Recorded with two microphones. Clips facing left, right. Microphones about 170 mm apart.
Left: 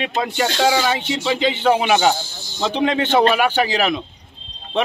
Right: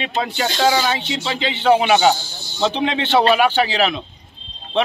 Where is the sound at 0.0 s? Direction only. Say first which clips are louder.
Left 1 dB; 5° left (ahead or behind).